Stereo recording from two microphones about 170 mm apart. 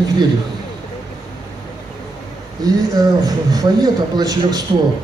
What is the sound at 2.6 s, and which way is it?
A man's voice, 20° right (ahead or behind).